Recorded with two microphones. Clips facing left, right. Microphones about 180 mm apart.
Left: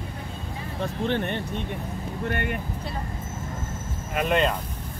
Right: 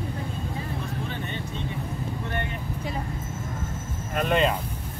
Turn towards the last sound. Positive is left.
turn(degrees=0)  # may be behind; listen again after turning